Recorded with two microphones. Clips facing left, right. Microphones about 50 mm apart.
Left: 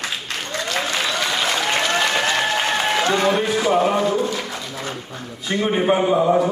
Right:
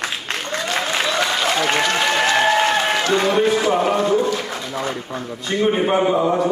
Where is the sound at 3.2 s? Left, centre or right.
Centre.